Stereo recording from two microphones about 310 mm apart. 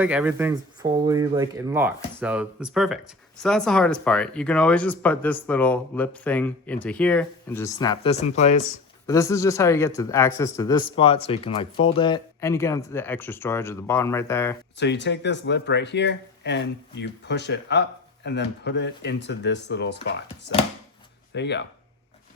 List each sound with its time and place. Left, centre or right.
0.0 s speech: centre; by 8.7 s left
9.0 s speech: centre
14.8 s speech: left